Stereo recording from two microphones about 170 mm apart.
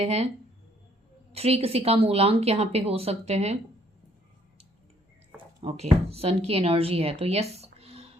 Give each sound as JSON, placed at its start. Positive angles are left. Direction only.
{"t": 0.0, "sound": "a woman's voice", "side_deg": -40}
{"t": 1.3, "sound": "a woman's voice", "side_deg": -35}
{"t": 5.5, "sound": "speech", "side_deg": -40}